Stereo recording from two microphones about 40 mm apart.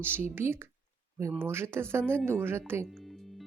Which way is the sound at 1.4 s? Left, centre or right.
Right.